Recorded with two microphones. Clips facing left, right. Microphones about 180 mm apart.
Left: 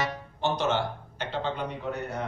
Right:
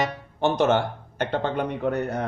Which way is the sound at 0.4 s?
55° right (ahead or behind).